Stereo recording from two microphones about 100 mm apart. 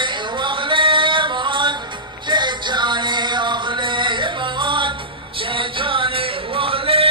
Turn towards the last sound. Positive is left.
turn(degrees=-65)  # may be behind; listen again after turning